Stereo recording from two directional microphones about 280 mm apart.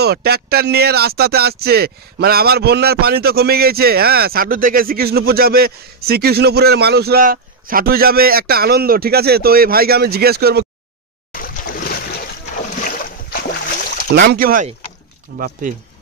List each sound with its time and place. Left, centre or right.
0.0 s speech: right
11.3 s boat: left
14.1 s speech: right